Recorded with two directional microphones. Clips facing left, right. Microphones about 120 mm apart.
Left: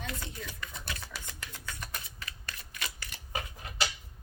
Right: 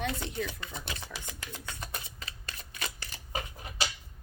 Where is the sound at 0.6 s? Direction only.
25° right (ahead or behind).